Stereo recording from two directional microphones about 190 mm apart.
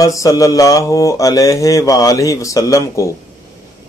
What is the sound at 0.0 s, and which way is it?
Speech, 15° left (ahead or behind).